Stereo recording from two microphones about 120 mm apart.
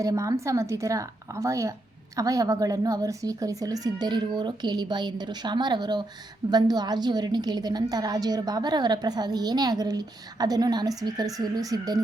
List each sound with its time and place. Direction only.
0.0 s a woman's voice: 30° right (ahead or behind)